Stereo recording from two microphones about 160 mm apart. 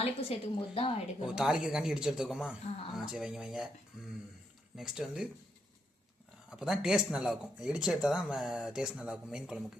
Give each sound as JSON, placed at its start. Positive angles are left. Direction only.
{"t": 0.0, "sound": "a woman's voice", "side_deg": 35}
{"t": 1.2, "sound": "speech", "side_deg": -5}
{"t": 2.6, "sound": "a woman's voice", "side_deg": 35}
{"t": 2.9, "sound": "speech", "side_deg": -5}
{"t": 4.8, "sound": "speech", "side_deg": -5}
{"t": 6.5, "sound": "speech", "side_deg": -5}